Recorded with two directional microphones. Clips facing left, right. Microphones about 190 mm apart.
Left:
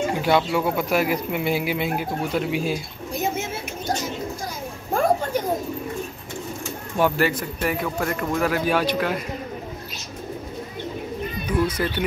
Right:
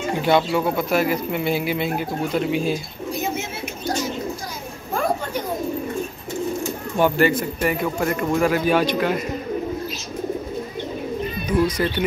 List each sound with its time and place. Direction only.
0.2 s speech: 5° left (ahead or behind)
7.0 s speech: centre (ahead or behind)
11.6 s speech: 5° left (ahead or behind)